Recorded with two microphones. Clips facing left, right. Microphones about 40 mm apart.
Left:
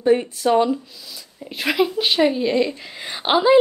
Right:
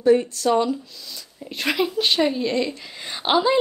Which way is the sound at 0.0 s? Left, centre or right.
Left.